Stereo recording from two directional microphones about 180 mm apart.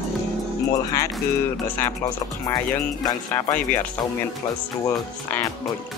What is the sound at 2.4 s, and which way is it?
Speech, 20° left (ahead or behind).